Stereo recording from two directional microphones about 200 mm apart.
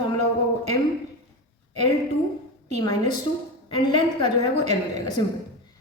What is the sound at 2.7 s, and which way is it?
A woman's voice, 20° left (ahead or behind).